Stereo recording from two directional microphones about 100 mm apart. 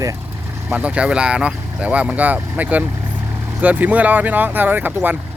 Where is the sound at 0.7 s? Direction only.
10° right (ahead or behind).